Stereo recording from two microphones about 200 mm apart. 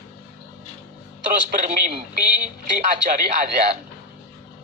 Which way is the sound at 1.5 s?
40° right (ahead or behind).